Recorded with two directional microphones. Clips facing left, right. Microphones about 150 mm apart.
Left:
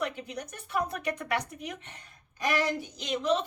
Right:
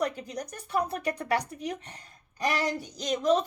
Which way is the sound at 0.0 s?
40° right (ahead or behind).